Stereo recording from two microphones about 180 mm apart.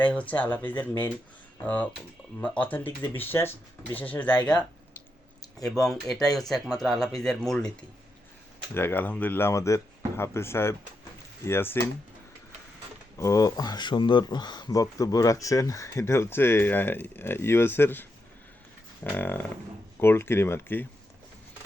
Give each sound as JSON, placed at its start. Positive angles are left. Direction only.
{"t": 0.0, "sound": "speech", "side_deg": 10}
{"t": 5.8, "sound": "speech", "side_deg": 0}
{"t": 13.1, "sound": "speech", "side_deg": 20}
{"t": 19.0, "sound": "speech", "side_deg": 10}